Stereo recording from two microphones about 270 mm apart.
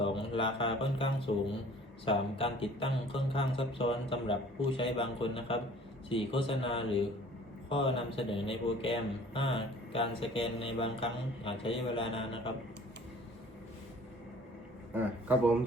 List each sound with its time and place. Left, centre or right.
0.0 s music: centre
2.0 s a man's voice: centre
14.9 s speech: centre